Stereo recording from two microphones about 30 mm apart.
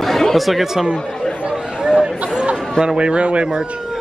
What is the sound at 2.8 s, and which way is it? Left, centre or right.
Speech, right.